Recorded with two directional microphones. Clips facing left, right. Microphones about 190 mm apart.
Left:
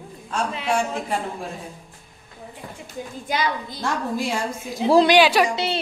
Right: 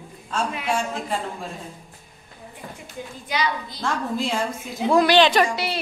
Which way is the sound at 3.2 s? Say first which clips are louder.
Left 1 dB; 50° left (ahead or behind).